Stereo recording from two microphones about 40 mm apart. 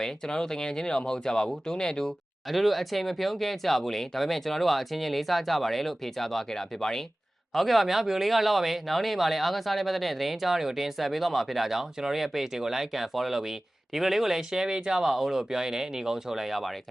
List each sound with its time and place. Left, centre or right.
0.0 s speech: centre
2.5 s speech: centre
7.5 s speech: centre